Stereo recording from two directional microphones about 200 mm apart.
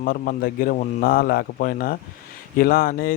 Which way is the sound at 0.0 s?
45° left (ahead or behind).